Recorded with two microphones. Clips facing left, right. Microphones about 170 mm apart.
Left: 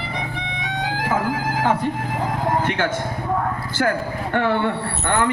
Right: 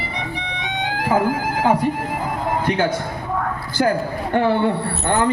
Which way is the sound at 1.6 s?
10° right (ahead or behind).